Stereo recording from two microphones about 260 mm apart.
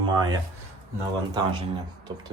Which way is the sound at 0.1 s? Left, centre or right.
Centre.